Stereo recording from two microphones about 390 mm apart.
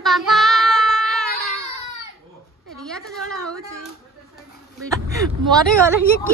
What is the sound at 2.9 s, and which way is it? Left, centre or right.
Speech, centre.